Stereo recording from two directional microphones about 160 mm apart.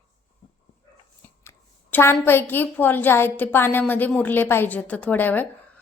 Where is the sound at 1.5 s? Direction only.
15° left (ahead or behind).